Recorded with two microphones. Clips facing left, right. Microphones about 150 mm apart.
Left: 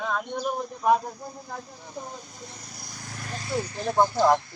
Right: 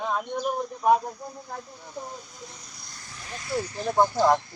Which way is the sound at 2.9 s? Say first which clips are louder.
Left 6 dB; 70° left (ahead or behind).